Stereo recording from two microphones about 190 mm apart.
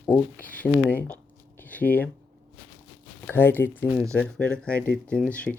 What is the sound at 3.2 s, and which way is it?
Speech, 10° left (ahead or behind).